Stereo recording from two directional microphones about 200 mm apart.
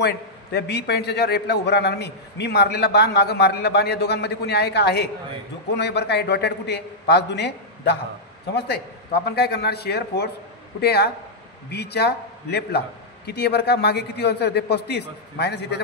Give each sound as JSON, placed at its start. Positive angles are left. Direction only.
{"t": 0.0, "sound": "a man's voice", "side_deg": 55}